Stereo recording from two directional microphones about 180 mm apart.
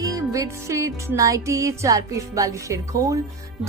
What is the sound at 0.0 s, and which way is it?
Music, 20° right (ahead or behind).